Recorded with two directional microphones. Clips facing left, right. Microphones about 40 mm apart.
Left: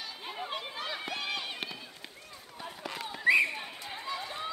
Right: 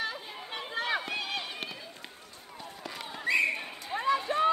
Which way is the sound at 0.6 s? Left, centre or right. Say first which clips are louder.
Right 6 dB; right.